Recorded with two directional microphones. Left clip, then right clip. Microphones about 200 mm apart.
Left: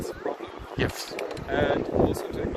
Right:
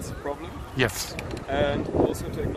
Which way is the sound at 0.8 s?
40° right (ahead or behind).